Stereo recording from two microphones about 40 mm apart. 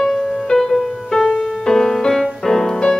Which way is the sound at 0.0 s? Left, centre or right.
Centre.